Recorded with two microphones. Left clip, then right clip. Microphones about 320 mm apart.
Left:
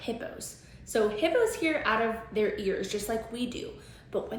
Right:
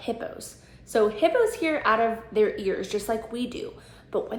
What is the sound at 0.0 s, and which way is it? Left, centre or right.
A woman's voice, centre.